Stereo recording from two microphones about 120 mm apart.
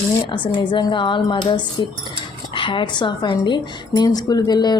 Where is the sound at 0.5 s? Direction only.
40° left (ahead or behind).